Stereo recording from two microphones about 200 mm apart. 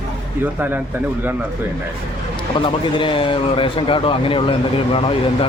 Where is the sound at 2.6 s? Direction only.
25° left (ahead or behind).